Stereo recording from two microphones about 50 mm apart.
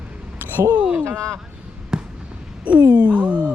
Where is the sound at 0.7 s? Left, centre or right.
Right.